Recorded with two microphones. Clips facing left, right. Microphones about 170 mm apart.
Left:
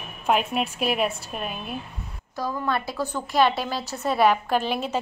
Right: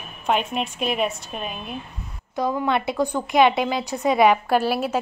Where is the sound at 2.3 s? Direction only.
20° right (ahead or behind).